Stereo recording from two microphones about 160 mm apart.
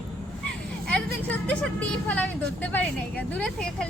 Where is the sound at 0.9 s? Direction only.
5° left (ahead or behind).